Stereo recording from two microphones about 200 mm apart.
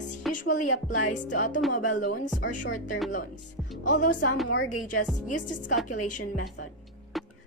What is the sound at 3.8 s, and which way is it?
Speech, 40° left (ahead or behind).